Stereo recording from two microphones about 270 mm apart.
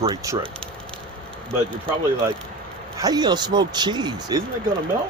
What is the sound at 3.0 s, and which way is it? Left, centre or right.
Speech, centre.